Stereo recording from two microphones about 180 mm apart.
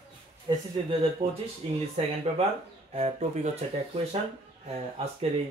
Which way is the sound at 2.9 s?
35° right (ahead or behind).